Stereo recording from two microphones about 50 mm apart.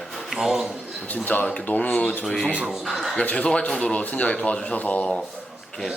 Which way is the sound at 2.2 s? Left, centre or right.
Centre.